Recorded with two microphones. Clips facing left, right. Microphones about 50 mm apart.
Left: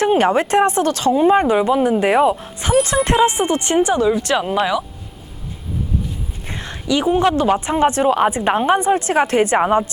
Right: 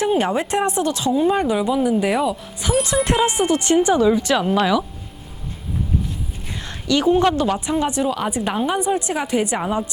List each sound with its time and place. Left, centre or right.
0.2 s speech: left
1.1 s speech: left
3.9 s speech: centre
6.5 s a sound: left
6.8 s speech: centre
7.3 s a woman's voice: left
9.0 s speech: left